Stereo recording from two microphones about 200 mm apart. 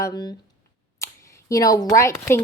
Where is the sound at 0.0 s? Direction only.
20° left (ahead or behind).